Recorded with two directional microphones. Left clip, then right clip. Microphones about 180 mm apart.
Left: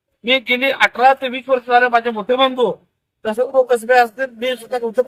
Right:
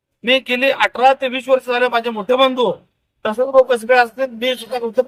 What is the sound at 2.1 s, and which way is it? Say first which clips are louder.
A man's voice: right 1 dB; 10° right (ahead or behind).